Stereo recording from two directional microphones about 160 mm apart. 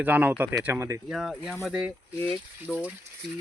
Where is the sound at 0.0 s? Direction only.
10° right (ahead or behind).